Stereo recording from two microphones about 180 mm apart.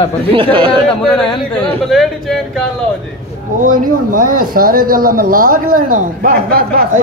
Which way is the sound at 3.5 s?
45° right (ahead or behind).